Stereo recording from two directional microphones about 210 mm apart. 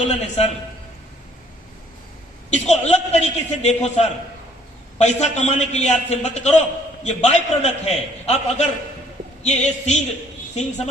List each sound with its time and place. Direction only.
0.0 s a man's voice: 30° left (ahead or behind)
2.5 s a man's voice: 30° left (ahead or behind)